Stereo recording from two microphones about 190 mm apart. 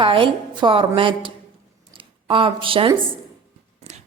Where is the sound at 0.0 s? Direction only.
30° right (ahead or behind).